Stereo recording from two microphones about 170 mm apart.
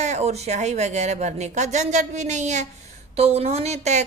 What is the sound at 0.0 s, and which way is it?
A woman's voice, 40° right (ahead or behind).